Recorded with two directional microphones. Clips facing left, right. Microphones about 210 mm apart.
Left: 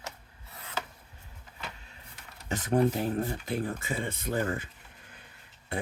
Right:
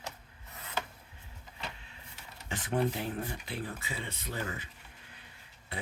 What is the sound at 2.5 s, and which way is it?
Speech, 40° left (ahead or behind).